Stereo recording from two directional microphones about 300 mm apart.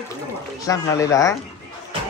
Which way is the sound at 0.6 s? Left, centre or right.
Centre.